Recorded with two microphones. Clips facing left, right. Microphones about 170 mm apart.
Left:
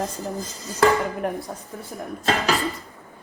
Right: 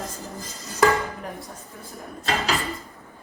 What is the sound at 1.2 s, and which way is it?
Speech, 60° left (ahead or behind).